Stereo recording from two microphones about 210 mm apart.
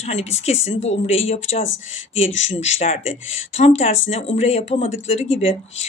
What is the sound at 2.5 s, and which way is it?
Speech, 35° left (ahead or behind).